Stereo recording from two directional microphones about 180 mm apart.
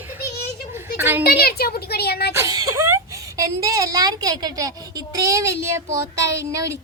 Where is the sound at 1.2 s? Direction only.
60° left (ahead or behind).